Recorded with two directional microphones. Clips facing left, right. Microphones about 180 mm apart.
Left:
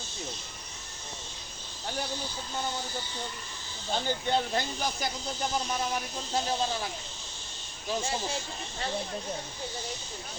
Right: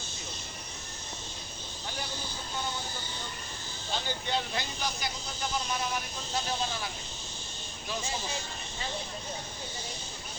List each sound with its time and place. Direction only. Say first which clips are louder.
3.9 s speech: left 5 dB; 45° left (ahead or behind)